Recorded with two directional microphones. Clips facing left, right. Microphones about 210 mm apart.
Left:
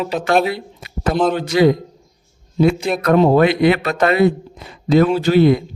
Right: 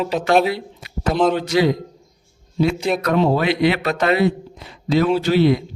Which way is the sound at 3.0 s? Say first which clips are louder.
Left 8 dB; 50° left (ahead or behind).